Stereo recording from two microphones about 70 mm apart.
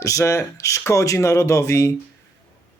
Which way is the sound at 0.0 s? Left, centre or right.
Left.